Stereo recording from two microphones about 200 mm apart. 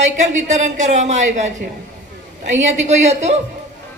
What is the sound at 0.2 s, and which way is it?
A man's voice, 35° right (ahead or behind).